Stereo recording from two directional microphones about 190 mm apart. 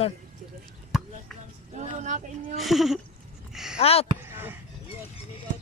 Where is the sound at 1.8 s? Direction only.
40° right (ahead or behind).